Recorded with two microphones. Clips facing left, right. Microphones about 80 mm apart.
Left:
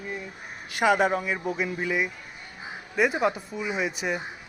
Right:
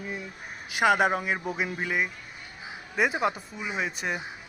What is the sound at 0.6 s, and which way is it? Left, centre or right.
Speech, centre.